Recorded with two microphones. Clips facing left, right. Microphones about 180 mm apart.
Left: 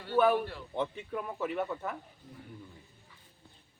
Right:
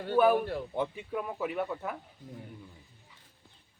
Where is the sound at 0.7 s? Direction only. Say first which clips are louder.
Right 1 dB; 5° right (ahead or behind).